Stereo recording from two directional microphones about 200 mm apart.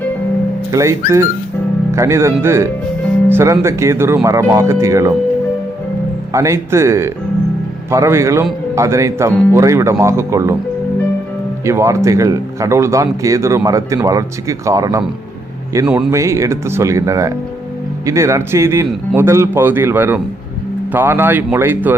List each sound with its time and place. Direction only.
0.7 s a man's voice: 15° right (ahead or behind)
6.3 s a man's voice: 15° right (ahead or behind)
11.6 s a man's voice: 15° right (ahead or behind)